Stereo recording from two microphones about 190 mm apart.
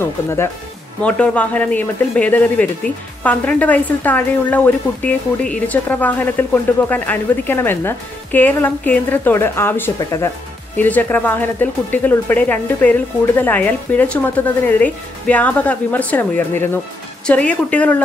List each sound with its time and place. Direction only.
0.0 s speech: 15° left (ahead or behind)